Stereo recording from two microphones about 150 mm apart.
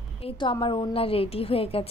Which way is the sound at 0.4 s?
35° left (ahead or behind).